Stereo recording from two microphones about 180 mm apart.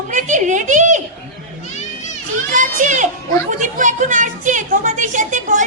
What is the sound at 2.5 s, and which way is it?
A woman's voice, 45° right (ahead or behind).